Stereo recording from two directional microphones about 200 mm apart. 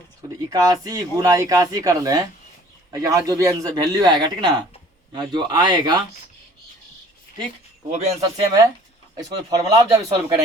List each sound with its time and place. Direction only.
0.5 s a man's voice: 20° right (ahead or behind)
7.9 s a man's voice: 30° right (ahead or behind)
9.5 s a man's voice: 20° right (ahead or behind)